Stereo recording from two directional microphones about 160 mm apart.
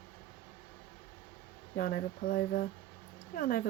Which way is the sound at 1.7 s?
65° left (ahead or behind).